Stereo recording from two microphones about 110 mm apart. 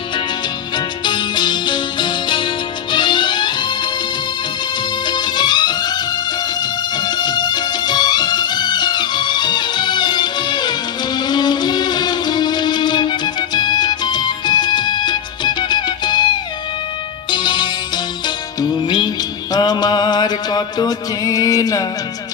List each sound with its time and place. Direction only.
1.0 s music: 40° left (ahead or behind)
5.0 s music: 40° left (ahead or behind)